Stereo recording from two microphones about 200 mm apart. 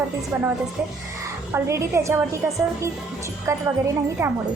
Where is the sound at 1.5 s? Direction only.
15° right (ahead or behind).